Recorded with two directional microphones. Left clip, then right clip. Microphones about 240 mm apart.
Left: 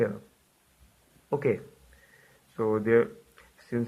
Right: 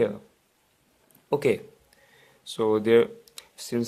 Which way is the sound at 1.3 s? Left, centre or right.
Right.